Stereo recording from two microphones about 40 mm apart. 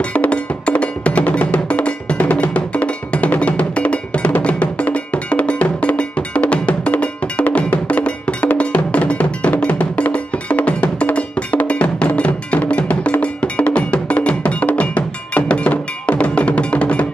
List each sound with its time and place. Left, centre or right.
0.0 s wood block: left
10.1 s music: left
13.2 s cowbell: left
14.8 s music: left